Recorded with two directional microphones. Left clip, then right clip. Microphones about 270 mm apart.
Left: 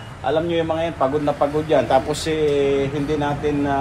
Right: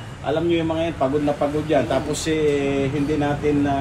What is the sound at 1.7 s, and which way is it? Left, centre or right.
Speech, centre.